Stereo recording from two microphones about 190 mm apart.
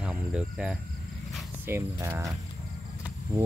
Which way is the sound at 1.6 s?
15° right (ahead or behind).